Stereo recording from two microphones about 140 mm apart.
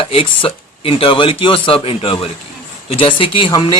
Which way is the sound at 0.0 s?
40° left (ahead or behind).